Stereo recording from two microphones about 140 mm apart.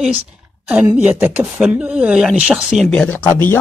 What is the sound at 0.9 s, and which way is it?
Speech, 10° right (ahead or behind).